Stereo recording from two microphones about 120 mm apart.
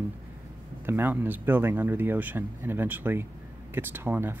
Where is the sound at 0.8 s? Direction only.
15° right (ahead or behind).